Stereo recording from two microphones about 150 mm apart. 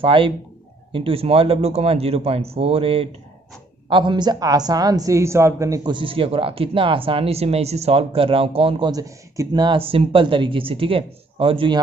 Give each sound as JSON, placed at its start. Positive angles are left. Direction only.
{"t": 0.0, "sound": "speech", "side_deg": -35}